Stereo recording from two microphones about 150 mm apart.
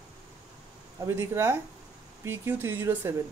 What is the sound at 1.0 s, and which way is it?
Speech, 20° right (ahead or behind).